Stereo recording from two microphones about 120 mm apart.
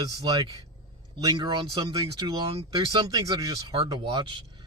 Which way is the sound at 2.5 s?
50° right (ahead or behind).